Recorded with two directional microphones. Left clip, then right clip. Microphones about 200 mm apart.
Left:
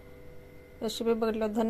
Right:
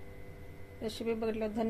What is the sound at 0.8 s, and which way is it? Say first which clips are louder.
Speech: left 6 dB; 35° left (ahead or behind).